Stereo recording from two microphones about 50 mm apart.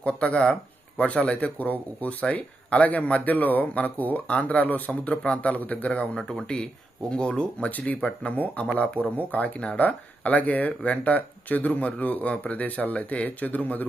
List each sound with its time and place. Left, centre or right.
0.0 s speech: left
7.1 s speech: centre
7.7 s speech: left